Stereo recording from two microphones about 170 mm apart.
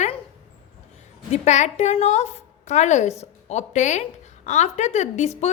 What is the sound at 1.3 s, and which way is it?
A woman's voice, 45° left (ahead or behind).